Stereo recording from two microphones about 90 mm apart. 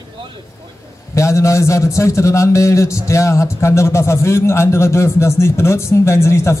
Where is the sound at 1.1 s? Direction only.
35° left (ahead or behind).